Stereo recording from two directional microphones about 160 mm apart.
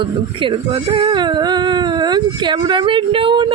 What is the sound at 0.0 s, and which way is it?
Speech, 30° right (ahead or behind).